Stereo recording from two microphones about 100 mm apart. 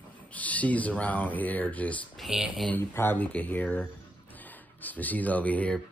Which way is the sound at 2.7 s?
20° left (ahead or behind).